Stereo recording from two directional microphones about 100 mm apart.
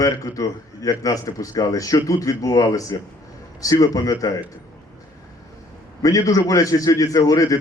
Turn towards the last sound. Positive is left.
turn(degrees=35)  # may be behind; listen again after turning